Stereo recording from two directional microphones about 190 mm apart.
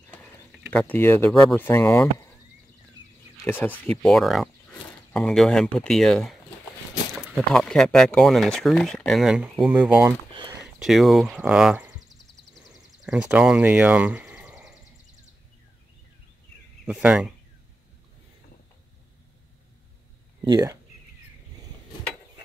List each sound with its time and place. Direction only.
0.1 s a sound: 10° left (ahead or behind)
0.7 s speech: 10° left (ahead or behind)
3.4 s speech: 10° left (ahead or behind); by 10.1 s 5° right (ahead or behind)
10.3 s a sound: 25° right (ahead or behind)
10.6 s speech: centre (ahead or behind)
13.0 s speech: 5° right (ahead or behind)
16.8 s speech: 5° right (ahead or behind)
20.4 s speech: 20° right (ahead or behind)